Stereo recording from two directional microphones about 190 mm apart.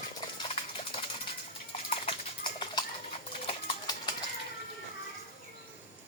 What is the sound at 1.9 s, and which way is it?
Horse, 30° left (ahead or behind).